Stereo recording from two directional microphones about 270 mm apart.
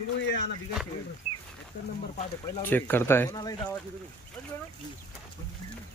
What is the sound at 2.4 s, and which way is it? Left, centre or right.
Speech, centre.